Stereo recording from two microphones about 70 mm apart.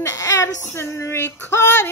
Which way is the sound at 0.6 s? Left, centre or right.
Left.